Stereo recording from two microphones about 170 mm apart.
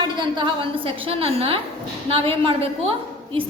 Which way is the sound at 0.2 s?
30° right (ahead or behind).